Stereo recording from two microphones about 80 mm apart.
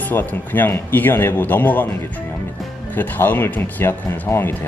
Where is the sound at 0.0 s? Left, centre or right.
Left.